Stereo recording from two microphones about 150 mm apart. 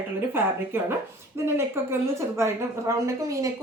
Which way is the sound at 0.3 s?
15° right (ahead or behind).